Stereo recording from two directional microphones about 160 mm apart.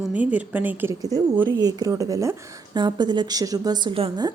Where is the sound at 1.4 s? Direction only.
25° right (ahead or behind).